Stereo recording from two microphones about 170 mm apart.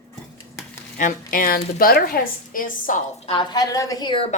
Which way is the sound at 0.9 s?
55° left (ahead or behind).